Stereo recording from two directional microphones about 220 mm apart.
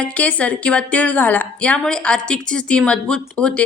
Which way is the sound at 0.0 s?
5° left (ahead or behind).